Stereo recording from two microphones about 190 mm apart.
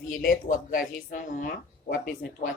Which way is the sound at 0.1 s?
45° left (ahead or behind).